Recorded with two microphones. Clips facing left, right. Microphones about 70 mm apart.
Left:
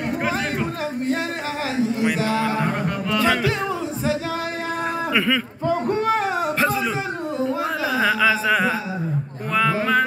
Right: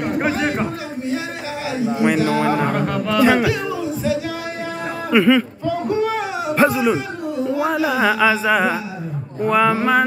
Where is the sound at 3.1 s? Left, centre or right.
Right.